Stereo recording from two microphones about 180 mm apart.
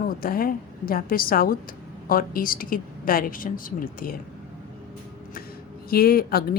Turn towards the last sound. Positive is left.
turn(degrees=55)  # may be behind; listen again after turning